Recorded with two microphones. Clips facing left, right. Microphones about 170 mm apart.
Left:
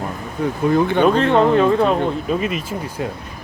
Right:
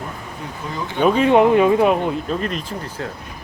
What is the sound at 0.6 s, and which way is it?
Speech, 60° left (ahead or behind).